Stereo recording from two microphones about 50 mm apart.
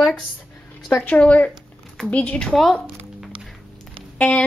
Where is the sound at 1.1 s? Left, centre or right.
Left.